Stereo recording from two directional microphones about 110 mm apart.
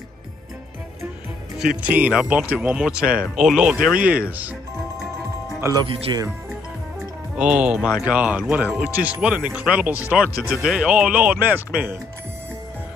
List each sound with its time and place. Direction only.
1.8 s speech: 15° right (ahead or behind)
6.1 s speech: 40° right (ahead or behind)
7.3 s speech: 10° right (ahead or behind)